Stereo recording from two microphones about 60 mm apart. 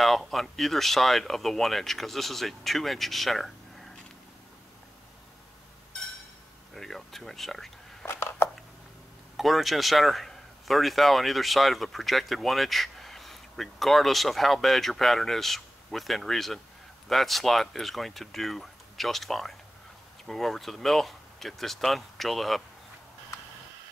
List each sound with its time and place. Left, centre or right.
0.0 s speech: centre
6.7 s speech: centre
8.0 s a sound: left
9.4 s speech: centre